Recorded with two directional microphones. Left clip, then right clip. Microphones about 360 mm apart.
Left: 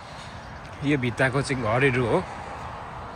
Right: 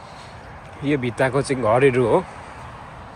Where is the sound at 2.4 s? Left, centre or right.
Left.